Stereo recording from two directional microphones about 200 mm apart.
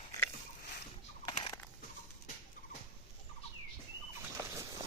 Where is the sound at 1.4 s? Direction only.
10° left (ahead or behind).